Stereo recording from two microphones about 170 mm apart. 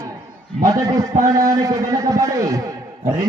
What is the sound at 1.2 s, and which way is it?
A man's voice, 20° right (ahead or behind).